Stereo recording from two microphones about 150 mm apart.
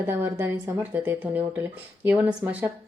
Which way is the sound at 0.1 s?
15° right (ahead or behind).